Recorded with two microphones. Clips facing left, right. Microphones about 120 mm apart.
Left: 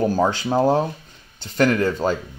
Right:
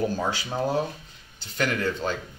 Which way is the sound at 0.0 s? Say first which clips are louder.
Left 7 dB; 45° left (ahead or behind).